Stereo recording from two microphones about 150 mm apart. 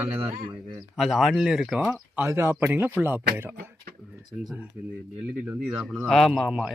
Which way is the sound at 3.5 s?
90° right.